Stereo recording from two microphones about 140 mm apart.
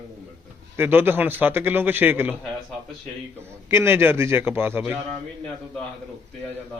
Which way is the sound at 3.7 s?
20° right (ahead or behind).